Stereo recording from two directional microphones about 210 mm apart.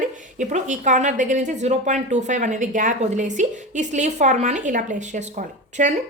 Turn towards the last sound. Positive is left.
turn(degrees=-35)  # may be behind; listen again after turning